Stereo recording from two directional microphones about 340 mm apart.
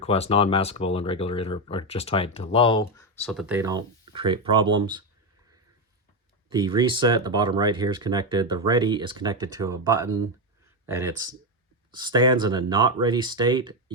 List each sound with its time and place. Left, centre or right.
0.0 s speech: centre
6.5 s speech: centre